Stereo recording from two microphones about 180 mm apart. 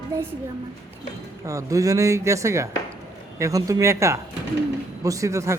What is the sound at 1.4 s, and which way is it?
Speech, 20° right (ahead or behind).